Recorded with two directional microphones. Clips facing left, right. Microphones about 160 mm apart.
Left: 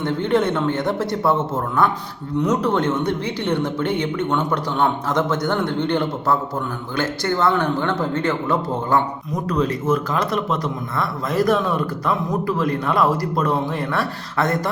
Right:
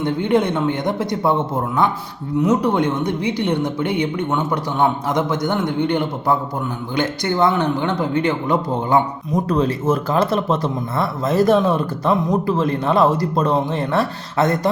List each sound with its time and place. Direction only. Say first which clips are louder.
0.0 s a woman's voice: right 1 dB; 15° right (ahead or behind)
9.5 s a man's voice: even; 30° right (ahead or behind)